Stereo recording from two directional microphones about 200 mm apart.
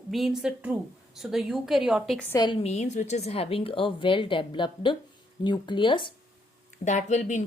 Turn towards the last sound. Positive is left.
turn(degrees=40)  # may be behind; listen again after turning